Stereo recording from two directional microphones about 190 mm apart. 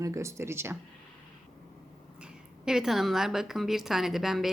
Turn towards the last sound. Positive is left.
turn(degrees=0)  # may be behind; listen again after turning